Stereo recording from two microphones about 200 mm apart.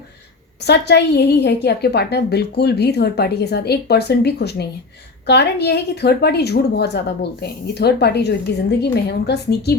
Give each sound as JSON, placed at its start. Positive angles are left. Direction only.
{"t": 0.6, "sound": "a woman's voice", "side_deg": 55}